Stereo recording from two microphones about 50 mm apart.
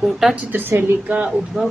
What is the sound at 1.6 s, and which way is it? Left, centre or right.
Speech, centre.